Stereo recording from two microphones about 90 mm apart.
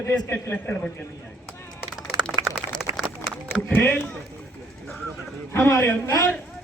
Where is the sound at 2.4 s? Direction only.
35° right (ahead or behind).